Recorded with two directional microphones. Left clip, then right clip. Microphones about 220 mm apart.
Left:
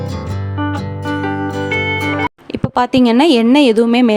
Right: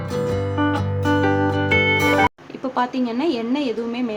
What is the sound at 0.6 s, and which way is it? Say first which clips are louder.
Music: left 3 dB; centre (ahead or behind).